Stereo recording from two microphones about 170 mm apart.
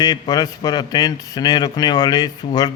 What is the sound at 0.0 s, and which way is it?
A man's voice, 25° left (ahead or behind).